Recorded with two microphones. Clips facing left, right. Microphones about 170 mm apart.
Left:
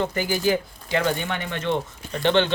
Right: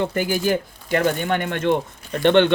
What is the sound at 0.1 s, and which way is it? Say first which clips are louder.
Speech: right 2 dB; 55° right (ahead or behind).